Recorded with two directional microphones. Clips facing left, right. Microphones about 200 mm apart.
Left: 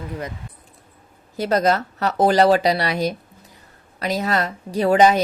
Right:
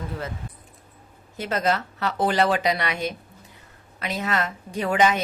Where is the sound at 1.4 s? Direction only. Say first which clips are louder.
Left 6 dB; 40° left (ahead or behind).